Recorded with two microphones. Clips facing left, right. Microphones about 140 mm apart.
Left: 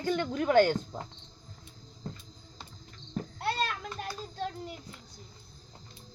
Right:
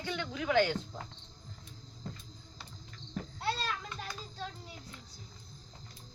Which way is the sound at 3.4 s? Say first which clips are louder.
Left 3 dB; 60° left (ahead or behind).